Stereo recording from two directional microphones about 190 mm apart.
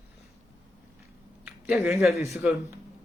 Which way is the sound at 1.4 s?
5° right (ahead or behind).